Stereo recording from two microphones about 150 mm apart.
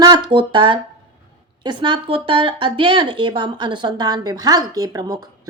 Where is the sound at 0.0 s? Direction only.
30° right (ahead or behind).